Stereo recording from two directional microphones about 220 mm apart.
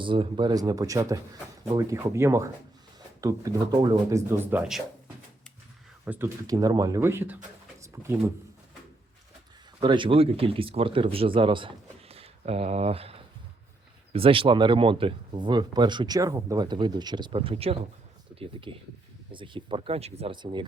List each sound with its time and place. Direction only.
0.0 s speech: 20° right (ahead or behind)
6.1 s speech: 10° right (ahead or behind)
7.8 s pigeon: 10° right (ahead or behind)
9.8 s speech: 20° right (ahead or behind)